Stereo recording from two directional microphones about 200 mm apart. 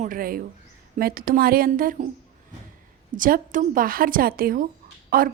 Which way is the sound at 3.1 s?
45° right (ahead or behind).